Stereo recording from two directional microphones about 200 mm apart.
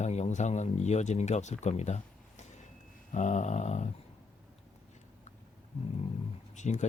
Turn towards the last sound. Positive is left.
turn(degrees=35)  # may be behind; listen again after turning